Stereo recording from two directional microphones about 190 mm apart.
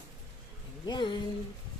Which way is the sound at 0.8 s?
25° left (ahead or behind).